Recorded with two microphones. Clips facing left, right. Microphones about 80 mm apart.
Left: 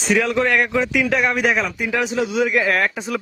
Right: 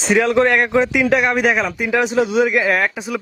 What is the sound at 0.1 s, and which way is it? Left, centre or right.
A man's voice, right.